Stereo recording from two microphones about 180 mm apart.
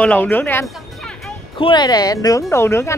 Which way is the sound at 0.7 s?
Centre (ahead or behind).